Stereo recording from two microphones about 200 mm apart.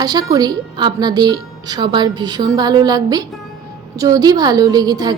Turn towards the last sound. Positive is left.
turn(degrees=-20)  # may be behind; listen again after turning